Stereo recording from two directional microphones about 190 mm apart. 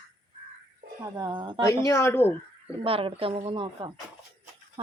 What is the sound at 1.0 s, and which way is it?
Speech, 25° right (ahead or behind).